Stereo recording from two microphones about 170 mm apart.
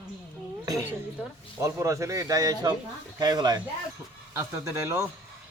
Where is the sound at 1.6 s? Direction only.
20° right (ahead or behind).